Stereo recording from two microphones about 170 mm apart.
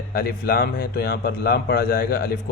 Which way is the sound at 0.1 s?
65° left (ahead or behind).